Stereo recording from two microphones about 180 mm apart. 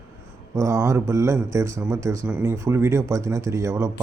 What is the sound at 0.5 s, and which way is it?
A man's voice, 15° right (ahead or behind).